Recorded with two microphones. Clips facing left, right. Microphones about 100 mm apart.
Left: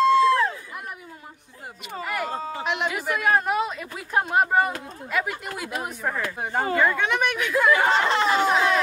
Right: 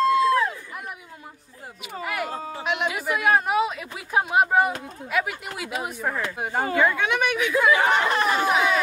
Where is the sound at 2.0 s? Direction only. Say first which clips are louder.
Even; 5° right (ahead or behind).